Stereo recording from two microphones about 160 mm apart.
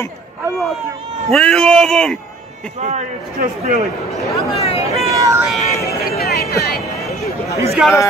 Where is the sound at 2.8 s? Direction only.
45° right (ahead or behind).